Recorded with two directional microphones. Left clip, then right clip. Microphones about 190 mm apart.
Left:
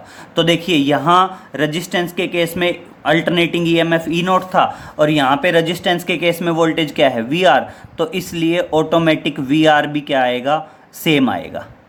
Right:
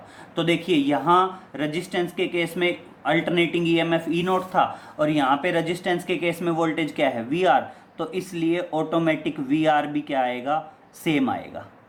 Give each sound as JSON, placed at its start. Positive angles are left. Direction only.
{"t": 0.3, "sound": "speech", "side_deg": 40}